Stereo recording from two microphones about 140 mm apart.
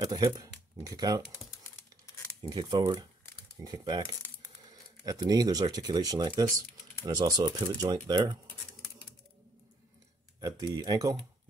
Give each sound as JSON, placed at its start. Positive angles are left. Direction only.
{"t": 0.0, "sound": "speech", "side_deg": -30}
{"t": 2.5, "sound": "speech", "side_deg": -30}
{"t": 10.4, "sound": "speech", "side_deg": -30}